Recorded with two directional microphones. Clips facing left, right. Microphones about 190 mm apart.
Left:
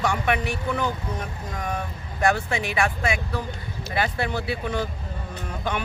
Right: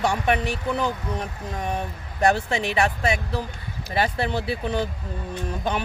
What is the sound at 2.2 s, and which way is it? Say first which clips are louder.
Speech: right 2 dB; 35° right (ahead or behind).